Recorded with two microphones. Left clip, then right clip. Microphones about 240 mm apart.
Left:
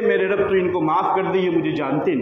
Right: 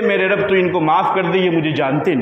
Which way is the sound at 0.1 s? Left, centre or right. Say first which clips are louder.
Right 3 dB; right.